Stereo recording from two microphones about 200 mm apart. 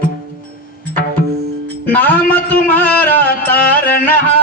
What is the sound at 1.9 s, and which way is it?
Music, 10° left (ahead or behind).